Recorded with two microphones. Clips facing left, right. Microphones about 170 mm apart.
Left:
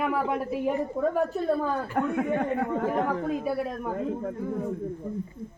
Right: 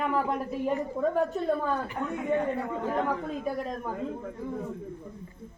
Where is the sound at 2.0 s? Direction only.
60° left (ahead or behind).